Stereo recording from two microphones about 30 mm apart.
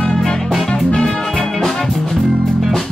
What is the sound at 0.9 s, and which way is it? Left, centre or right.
Music, centre.